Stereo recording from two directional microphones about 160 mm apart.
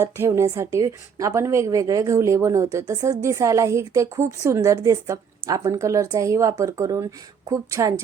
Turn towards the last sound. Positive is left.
turn(degrees=-20)  # may be behind; listen again after turning